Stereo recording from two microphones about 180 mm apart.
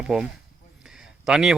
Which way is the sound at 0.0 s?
Centre (ahead or behind).